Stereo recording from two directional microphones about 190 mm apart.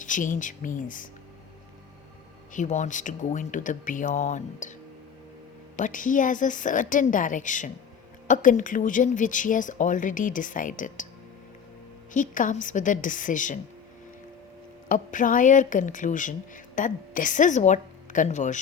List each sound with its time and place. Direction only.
0.0 s speech: 40° left (ahead or behind)
2.5 s speech: 40° left (ahead or behind)
5.7 s speech: 40° left (ahead or behind)
12.1 s speech: 45° left (ahead or behind)
14.8 s a woman's voice: 45° left (ahead or behind)